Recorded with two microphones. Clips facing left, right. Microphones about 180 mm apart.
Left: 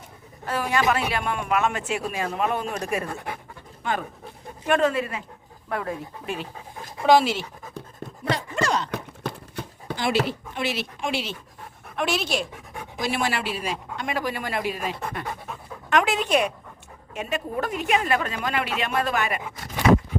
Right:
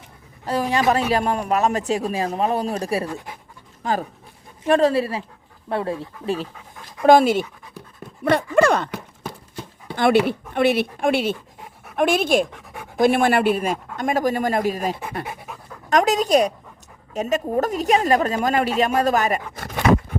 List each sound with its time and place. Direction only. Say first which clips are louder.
0.4 s a woman's voice: right 4 dB; 35° right (ahead or behind)
3.1 s speech: right 1 dB; 60° left (ahead or behind)
3.8 s a woman's voice: right 4 dB; 35° right (ahead or behind)
7.1 s speech: right 5 dB; 50° right (ahead or behind)
8.2 s dog: right 9 dB; 55° right (ahead or behind)
9.9 s speech: right 7 dB; 55° right (ahead or behind)
12.5 s pant: even; centre (ahead or behind)
13.0 s speech: right 10 dB; 55° right (ahead or behind)
15.2 s pant: right 1 dB; 10° right (ahead or behind)
15.9 s a woman's voice: right 5 dB; 40° right (ahead or behind)
19.5 s a sound: left 1 dB; 60° right (ahead or behind)